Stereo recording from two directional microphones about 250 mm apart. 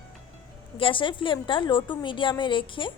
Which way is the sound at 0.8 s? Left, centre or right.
Centre.